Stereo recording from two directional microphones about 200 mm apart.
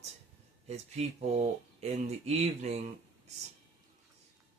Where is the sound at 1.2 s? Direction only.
30° right (ahead or behind).